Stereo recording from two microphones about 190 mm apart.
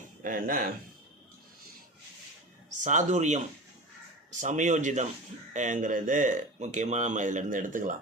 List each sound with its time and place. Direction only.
0.2 s speech: 45° right (ahead or behind)
2.8 s speech: 40° right (ahead or behind)